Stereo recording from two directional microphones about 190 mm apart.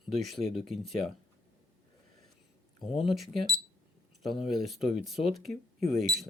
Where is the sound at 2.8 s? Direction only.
Centre (ahead or behind).